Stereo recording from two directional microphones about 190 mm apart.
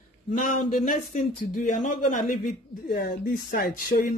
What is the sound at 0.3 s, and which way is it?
A woman's voice, 45° left (ahead or behind).